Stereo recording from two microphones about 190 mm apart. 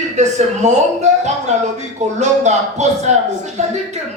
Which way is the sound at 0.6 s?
40° right (ahead or behind).